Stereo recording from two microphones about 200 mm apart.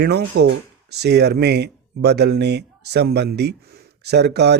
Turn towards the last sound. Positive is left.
turn(degrees=-55)  # may be behind; listen again after turning